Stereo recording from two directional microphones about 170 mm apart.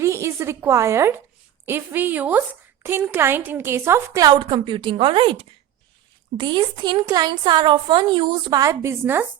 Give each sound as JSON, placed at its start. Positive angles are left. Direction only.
{"t": 0.0, "sound": "a woman's voice", "side_deg": -15}